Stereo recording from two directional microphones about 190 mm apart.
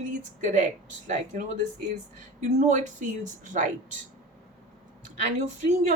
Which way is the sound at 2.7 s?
40° right (ahead or behind).